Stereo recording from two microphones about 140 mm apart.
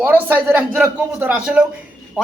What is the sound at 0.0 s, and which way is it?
A man's voice, 10° right (ahead or behind).